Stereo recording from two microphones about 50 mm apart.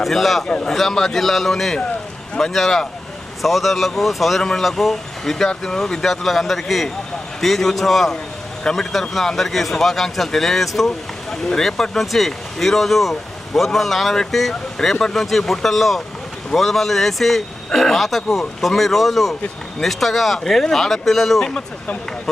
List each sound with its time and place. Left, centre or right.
0.0 s speech: centre
0.4 s speech: left
0.7 s speech: centre